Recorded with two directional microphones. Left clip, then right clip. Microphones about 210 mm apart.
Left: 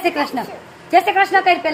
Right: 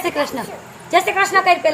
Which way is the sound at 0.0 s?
30° left (ahead or behind).